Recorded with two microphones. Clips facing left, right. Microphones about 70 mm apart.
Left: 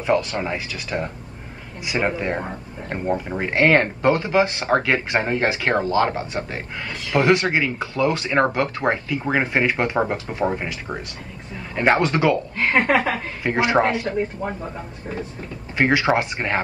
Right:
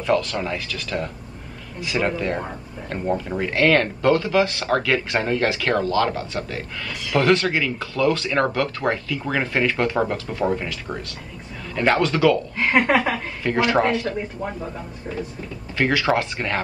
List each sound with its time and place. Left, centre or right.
0.0 s speech: left
15.8 s speech: left